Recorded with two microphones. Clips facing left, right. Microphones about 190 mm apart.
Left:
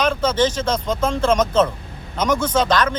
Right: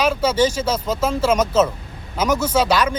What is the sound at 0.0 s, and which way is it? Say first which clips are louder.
Speech: right 1 dB; 10° right (ahead or behind).